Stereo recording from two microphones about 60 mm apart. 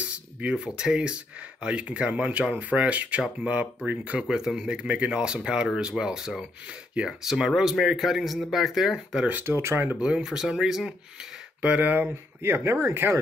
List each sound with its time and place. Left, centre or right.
0.0 s a sound: centre
0.7 s speech: centre
4.2 s speech: centre
9.4 s speech: right
9.9 s speech: centre
11.6 s speech: right